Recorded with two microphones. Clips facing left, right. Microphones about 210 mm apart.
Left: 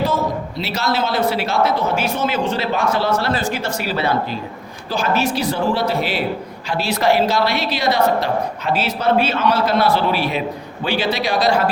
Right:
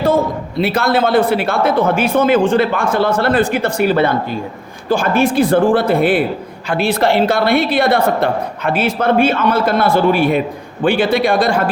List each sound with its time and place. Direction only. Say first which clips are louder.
0.0 s a man's voice: right 5 dB; 55° right (ahead or behind)